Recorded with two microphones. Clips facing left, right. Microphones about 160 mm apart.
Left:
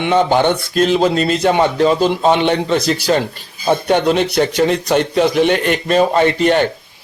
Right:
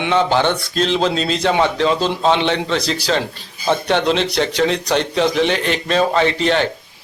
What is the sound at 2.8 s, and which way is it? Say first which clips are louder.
Speech: left 5 dB; 55° left (ahead or behind).